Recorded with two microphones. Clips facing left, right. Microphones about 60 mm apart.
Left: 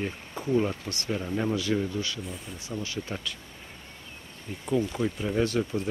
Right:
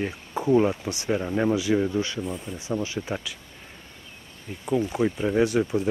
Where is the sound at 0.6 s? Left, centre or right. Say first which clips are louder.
Right 6 dB; centre.